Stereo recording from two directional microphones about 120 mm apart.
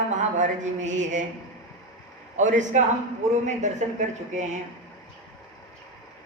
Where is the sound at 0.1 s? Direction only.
90° right.